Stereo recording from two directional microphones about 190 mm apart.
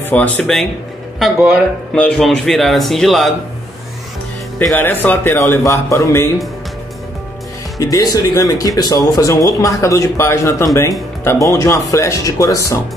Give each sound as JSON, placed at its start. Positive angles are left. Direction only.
{"t": 0.0, "sound": "speech", "side_deg": 5}
{"t": 4.6, "sound": "speech", "side_deg": 10}
{"t": 7.8, "sound": "speech", "side_deg": 20}